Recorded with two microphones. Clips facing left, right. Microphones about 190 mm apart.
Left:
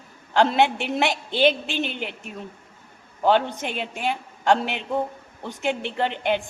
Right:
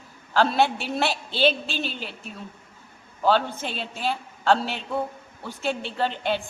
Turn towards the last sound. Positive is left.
turn(degrees=15)  # may be behind; listen again after turning